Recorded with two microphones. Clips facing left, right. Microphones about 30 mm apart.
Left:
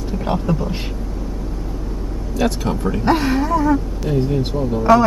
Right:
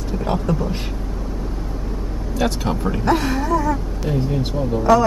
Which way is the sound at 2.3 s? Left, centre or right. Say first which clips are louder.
Left 1 dB; centre.